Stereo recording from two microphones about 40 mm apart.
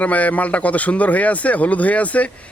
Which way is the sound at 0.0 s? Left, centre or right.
Left.